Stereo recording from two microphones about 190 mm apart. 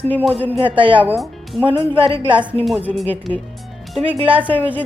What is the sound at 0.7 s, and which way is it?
Speech, 25° right (ahead or behind).